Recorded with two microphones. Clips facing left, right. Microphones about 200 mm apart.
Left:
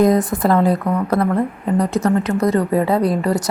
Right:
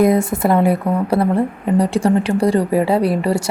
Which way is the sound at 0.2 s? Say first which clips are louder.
Right 1 dB; 25° right (ahead or behind).